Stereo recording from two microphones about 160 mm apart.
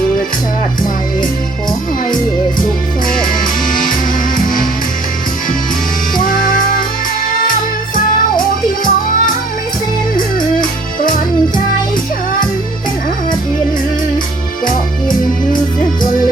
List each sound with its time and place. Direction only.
6.1 s music: 60° left (ahead or behind)
7.9 s music: 60° left (ahead or behind)
10.6 s music: 60° left (ahead or behind)